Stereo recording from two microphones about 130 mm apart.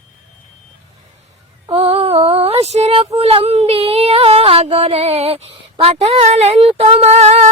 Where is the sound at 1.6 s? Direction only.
50° right (ahead or behind).